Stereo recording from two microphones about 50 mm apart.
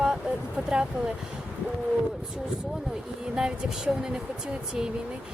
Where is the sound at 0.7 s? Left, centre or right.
Centre.